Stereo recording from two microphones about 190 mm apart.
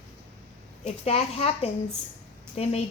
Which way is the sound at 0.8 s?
35° left (ahead or behind).